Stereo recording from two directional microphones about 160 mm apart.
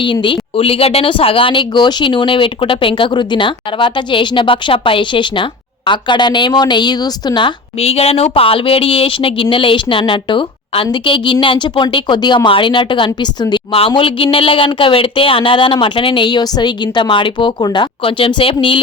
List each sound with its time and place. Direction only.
0.0 s speech: 30° left (ahead or behind)